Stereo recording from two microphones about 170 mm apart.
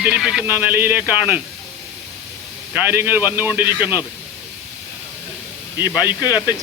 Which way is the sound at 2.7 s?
15° right (ahead or behind).